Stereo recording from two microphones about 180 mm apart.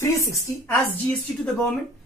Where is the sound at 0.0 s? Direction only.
15° left (ahead or behind).